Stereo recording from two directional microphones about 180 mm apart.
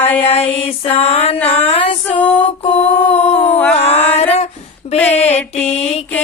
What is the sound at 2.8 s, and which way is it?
Mantra, 10° left (ahead or behind).